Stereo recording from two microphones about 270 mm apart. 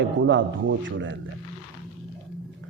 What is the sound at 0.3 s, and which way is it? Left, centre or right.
Speech, right.